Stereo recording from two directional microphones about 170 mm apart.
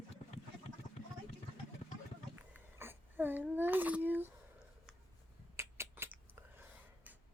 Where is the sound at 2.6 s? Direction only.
15° right (ahead or behind).